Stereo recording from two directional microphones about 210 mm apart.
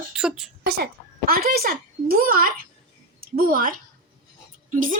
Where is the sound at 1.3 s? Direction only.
45° right (ahead or behind).